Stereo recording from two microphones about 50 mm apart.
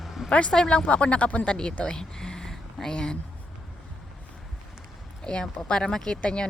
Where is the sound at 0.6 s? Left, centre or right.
Left.